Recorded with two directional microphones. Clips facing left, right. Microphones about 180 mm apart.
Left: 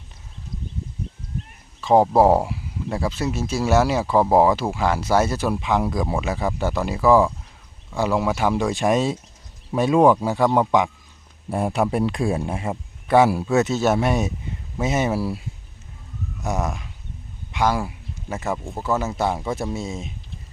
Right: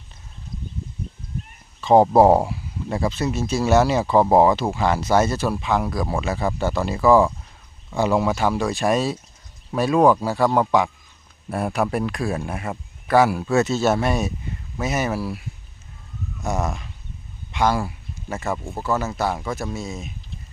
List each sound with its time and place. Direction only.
1.8 s speech: 5° left (ahead or behind); by 13.4 s 25° left (ahead or behind)
13.4 s speech: 10° left (ahead or behind); by 15.4 s 30° left (ahead or behind)
16.4 s speech: 10° left (ahead or behind)
18.5 s speech: centre (ahead or behind)
19.1 s speech: 20° left (ahead or behind)